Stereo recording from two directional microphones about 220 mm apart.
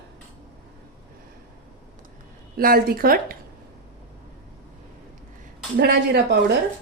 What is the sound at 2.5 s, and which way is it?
Speech, 40° right (ahead or behind).